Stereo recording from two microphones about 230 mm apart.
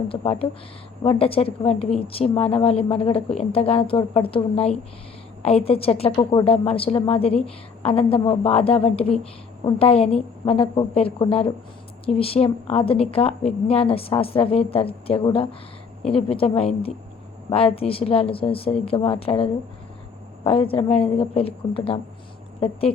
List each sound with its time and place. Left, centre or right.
0.1 s a woman's voice: left